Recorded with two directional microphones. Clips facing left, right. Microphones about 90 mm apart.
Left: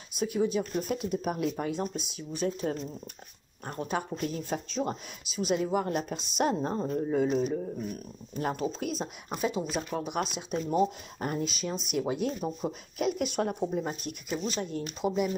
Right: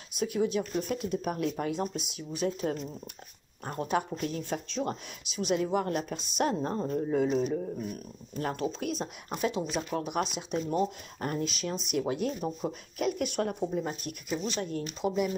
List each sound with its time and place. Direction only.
0.2 s a woman's voice: centre (ahead or behind)
1.7 s a woman's voice: 5° right (ahead or behind)
8.4 s speech: 15° left (ahead or behind)
8.7 s a woman's voice: centre (ahead or behind)
13.0 s speech: 15° left (ahead or behind)
14.3 s speech: 5° left (ahead or behind)